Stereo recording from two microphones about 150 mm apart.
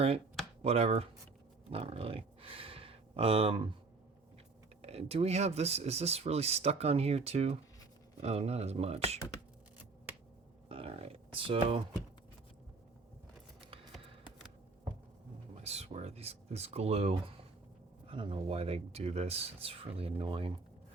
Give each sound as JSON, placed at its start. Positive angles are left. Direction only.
{"t": 0.6, "sound": "speech", "side_deg": -45}
{"t": 4.8, "sound": "speech", "side_deg": -45}
{"t": 10.7, "sound": "speech", "side_deg": -40}
{"t": 15.5, "sound": "speech", "side_deg": -45}